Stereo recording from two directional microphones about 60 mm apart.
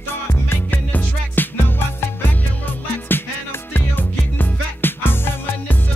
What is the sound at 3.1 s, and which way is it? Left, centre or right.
Music, left.